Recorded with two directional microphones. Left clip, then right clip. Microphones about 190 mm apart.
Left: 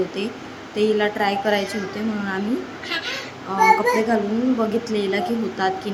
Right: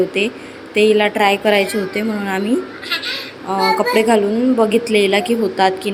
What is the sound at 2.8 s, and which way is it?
Speech, 20° left (ahead or behind).